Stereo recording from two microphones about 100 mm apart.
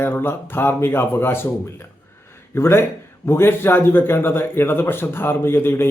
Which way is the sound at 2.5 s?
25° left (ahead or behind).